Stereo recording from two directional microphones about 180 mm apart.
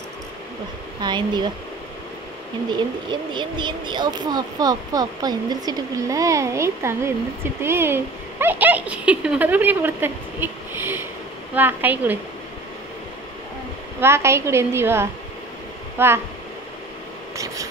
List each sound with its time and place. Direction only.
1.0 s speech: 25° right (ahead or behind)
3.1 s speech: 25° right (ahead or behind); by 12.2 s 10° right (ahead or behind)
14.0 s speech: 15° right (ahead or behind)